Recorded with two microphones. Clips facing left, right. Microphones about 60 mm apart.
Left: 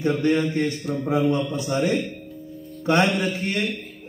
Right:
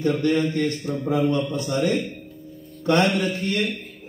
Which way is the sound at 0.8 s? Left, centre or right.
Centre.